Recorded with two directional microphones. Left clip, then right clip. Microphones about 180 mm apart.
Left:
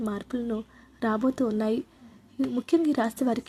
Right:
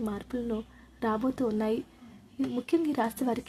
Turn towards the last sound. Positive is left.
turn(degrees=25)  # may be behind; listen again after turning